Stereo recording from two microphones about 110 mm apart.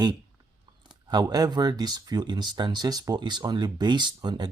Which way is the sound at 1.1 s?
35° right (ahead or behind).